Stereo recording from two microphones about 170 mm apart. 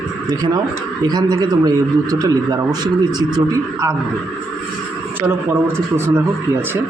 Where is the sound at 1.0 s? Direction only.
25° right (ahead or behind).